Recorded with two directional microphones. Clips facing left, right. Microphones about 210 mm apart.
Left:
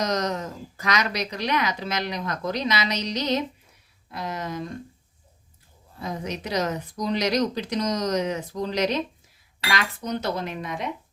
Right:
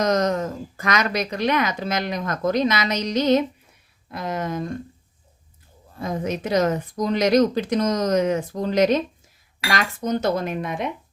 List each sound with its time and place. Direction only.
0.0 s speech: 50° right (ahead or behind)
6.0 s speech: 50° right (ahead or behind)